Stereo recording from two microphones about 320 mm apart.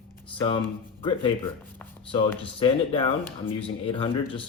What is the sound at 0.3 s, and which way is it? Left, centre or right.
Speech, centre.